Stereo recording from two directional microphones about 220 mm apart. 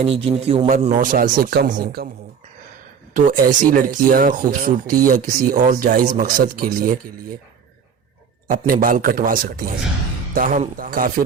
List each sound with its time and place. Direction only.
0.0 s speech: 25° right (ahead or behind); by 2.0 s 45° right (ahead or behind)
3.2 s speech: 40° right (ahead or behind)
8.4 s speech: 40° right (ahead or behind)